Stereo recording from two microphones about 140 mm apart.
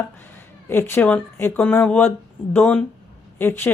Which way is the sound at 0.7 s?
15° left (ahead or behind).